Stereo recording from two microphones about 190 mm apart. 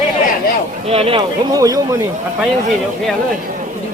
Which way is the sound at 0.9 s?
30° right (ahead or behind).